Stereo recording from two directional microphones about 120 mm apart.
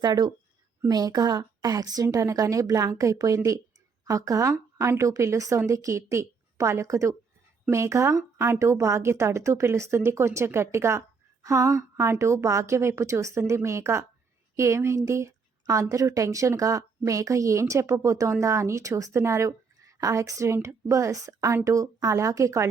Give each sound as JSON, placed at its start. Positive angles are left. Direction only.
{"t": 0.0, "sound": "a woman's voice", "side_deg": -35}